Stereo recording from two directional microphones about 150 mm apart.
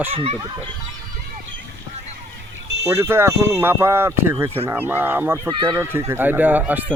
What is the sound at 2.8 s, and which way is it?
Speech, 20° right (ahead or behind).